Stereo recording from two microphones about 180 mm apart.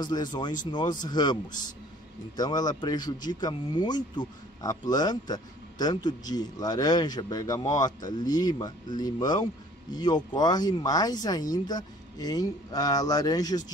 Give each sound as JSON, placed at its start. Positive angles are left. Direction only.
{"t": 0.0, "sound": "speech", "side_deg": 25}